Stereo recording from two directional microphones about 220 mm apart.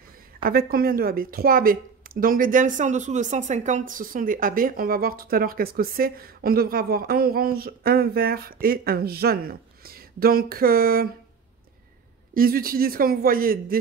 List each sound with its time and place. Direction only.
0.4 s a woman's voice: 40° right (ahead or behind)
12.4 s a woman's voice: 40° right (ahead or behind)